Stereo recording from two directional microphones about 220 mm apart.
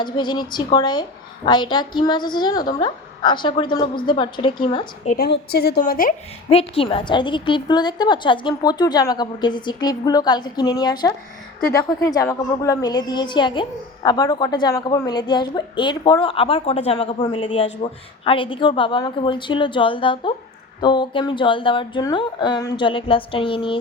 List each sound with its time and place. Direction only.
0.0 s a woman's voice: 20° left (ahead or behind)
5.0 s a woman's voice: 45° left (ahead or behind)
6.5 s a woman's voice: 25° left (ahead or behind)